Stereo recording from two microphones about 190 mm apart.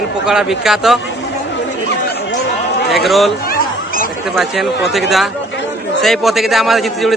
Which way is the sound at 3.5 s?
50° left (ahead or behind).